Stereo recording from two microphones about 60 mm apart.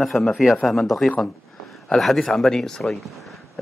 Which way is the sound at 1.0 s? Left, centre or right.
Centre.